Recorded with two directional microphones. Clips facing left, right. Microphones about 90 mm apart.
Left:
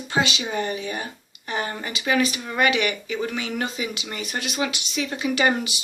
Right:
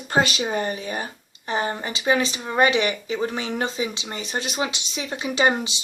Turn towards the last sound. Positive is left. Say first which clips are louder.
# right 1 dB
turn(degrees=-25)  # may be behind; listen again after turning